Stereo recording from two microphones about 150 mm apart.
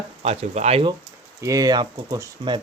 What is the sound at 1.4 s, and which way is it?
Speech, 20° right (ahead or behind).